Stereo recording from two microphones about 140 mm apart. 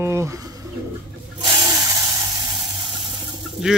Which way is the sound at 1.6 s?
25° right (ahead or behind).